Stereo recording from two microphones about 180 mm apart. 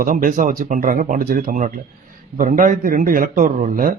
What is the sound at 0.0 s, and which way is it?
A man's voice, 50° right (ahead or behind).